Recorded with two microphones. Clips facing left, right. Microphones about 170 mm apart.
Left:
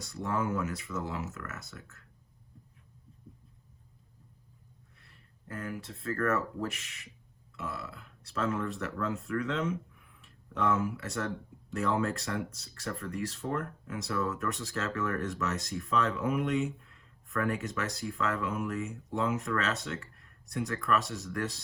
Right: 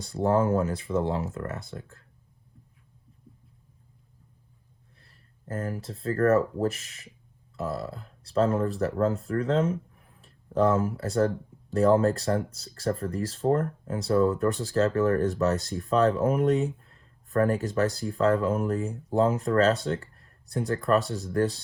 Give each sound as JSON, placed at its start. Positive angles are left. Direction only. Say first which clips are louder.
{"t": 0.0, "sound": "speech", "louder": "right 9 dB", "side_deg": -35}
{"t": 4.9, "sound": "speech", "louder": "right 1 dB", "side_deg": -35}